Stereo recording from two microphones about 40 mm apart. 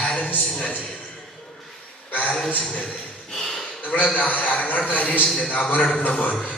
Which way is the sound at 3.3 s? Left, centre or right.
Centre.